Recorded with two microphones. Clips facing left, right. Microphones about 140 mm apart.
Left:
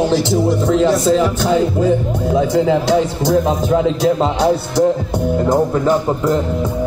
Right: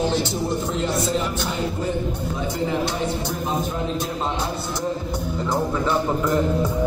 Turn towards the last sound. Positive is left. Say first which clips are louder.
# left 8 dB
turn(degrees=45)  # may be behind; listen again after turning